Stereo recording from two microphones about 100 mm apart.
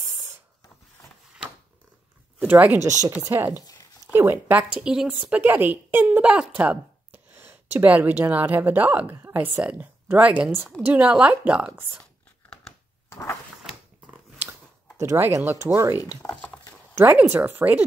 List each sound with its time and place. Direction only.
2.4 s a woman's voice: 15° right (ahead or behind)
3.2 s speech: 30° right (ahead or behind)
4.7 s a woman's voice: 5° right (ahead or behind)
12.0 s a sound: 5° left (ahead or behind)
13.1 s a sound: 25° left (ahead or behind)
15.0 s speech: 25° right (ahead or behind)
16.2 s speech: 35° left (ahead or behind)
16.9 s speech: 20° right (ahead or behind)